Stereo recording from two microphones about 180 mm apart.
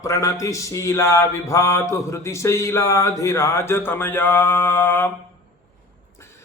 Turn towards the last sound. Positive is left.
turn(degrees=10)  # may be behind; listen again after turning